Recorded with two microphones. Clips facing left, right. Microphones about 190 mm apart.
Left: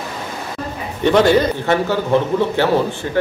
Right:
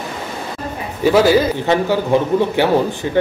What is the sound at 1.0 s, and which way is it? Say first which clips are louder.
A man's voice: right 1 dB; 5° right (ahead or behind).